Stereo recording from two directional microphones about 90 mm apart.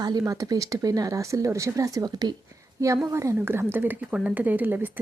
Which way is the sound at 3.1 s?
35° right (ahead or behind).